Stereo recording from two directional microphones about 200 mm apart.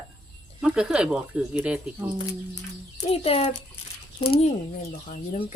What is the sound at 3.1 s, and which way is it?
Speech, 30° left (ahead or behind).